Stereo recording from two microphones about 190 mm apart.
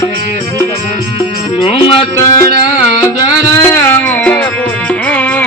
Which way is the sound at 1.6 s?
30° left (ahead or behind).